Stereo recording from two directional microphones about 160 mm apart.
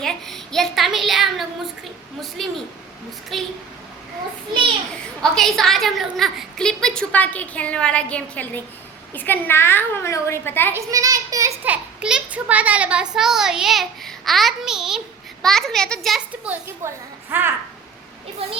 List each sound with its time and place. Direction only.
0.0 s child singing: centre (ahead or behind)
2.4 s a child's voice: centre (ahead or behind)
5.2 s a child's voice: 5° left (ahead or behind)
10.8 s a child's voice: 20° right (ahead or behind)